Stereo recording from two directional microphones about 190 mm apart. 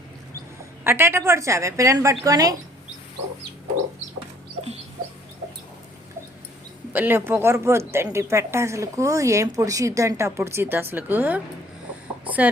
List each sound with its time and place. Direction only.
0.9 s speech: 15° right (ahead or behind)
6.9 s speech: 10° right (ahead or behind)
12.2 s a sound: 10° right (ahead or behind)